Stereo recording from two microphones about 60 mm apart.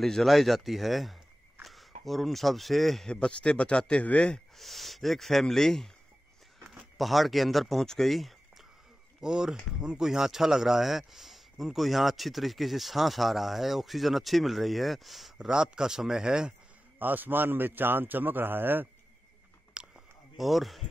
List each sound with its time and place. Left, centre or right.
0.0 s a man's voice: centre
3.1 s speech: centre
4.6 s speech: centre
7.0 s speech: centre
9.2 s speech: centre
15.3 s speech: centre
17.0 s a man's voice: right
19.7 s a sound: centre
20.3 s speech: centre